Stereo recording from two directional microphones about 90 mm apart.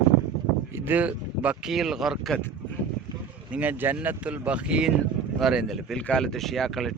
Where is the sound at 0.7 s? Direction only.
20° right (ahead or behind).